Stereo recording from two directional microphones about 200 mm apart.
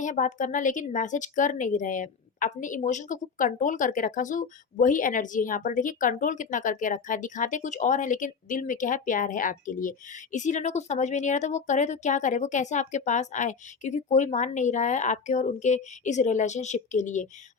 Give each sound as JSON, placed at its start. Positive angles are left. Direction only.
{"t": 0.0, "sound": "speech", "side_deg": 40}